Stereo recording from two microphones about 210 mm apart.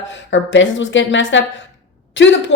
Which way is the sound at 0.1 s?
60° left (ahead or behind).